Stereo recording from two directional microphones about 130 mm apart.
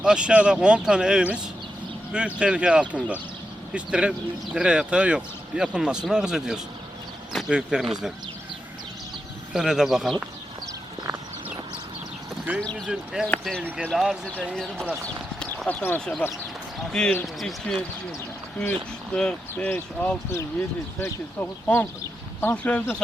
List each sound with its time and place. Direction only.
0.0 s a man's voice: 5° right (ahead or behind)
9.5 s a man's voice: 5° right (ahead or behind)
12.5 s a man's voice: 5° left (ahead or behind)
15.6 s speech: 15° left (ahead or behind)